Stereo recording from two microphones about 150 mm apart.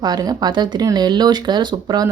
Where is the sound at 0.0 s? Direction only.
25° right (ahead or behind).